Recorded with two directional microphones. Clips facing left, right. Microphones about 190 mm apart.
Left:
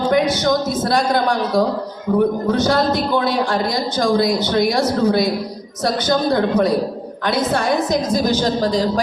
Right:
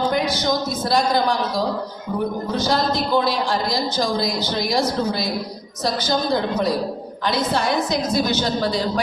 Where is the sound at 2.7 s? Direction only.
60° left (ahead or behind).